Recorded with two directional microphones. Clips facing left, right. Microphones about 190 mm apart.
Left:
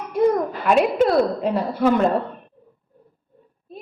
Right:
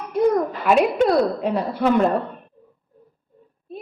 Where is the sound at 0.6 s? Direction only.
Centre (ahead or behind).